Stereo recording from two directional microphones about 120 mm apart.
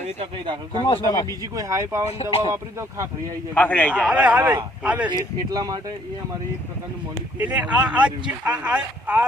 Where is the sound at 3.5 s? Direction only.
15° left (ahead or behind).